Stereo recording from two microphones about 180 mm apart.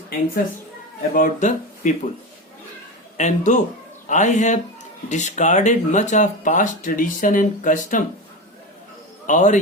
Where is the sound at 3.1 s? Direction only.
40° left (ahead or behind).